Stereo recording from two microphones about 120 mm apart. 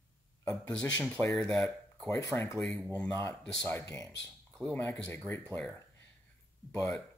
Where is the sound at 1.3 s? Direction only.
5° left (ahead or behind).